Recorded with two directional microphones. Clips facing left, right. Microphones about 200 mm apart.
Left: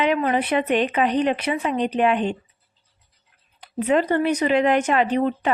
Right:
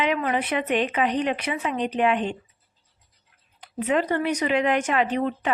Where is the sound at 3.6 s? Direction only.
35° left (ahead or behind).